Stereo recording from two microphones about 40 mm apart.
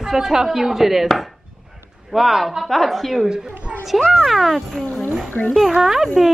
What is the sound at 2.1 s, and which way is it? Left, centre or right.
A woman's voice, centre.